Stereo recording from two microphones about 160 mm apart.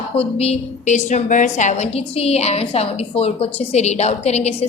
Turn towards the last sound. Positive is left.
turn(degrees=40)  # may be behind; listen again after turning